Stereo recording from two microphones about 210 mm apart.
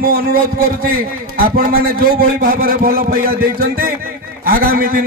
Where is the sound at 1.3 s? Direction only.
45° right (ahead or behind).